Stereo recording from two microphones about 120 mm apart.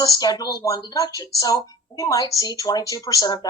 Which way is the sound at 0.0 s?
30° left (ahead or behind).